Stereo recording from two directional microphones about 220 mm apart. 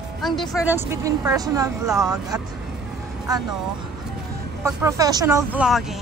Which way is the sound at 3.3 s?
15° right (ahead or behind).